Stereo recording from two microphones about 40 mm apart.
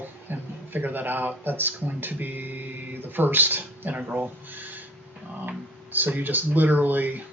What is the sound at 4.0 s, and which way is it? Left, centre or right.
Speech, right.